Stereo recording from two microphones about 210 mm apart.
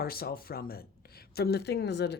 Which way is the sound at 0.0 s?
45° left (ahead or behind).